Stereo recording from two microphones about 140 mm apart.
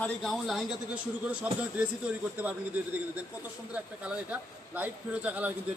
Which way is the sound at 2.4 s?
10° right (ahead or behind).